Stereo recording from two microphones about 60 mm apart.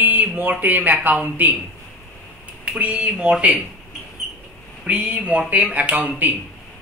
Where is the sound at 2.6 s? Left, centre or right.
Right.